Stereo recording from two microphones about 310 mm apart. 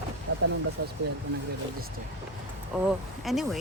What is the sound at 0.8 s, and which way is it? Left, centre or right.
Speech, right.